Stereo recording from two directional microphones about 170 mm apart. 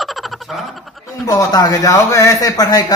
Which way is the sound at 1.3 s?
20° left (ahead or behind).